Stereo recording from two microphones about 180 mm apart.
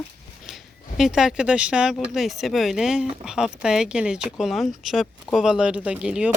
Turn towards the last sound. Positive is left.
turn(degrees=-5)  # may be behind; listen again after turning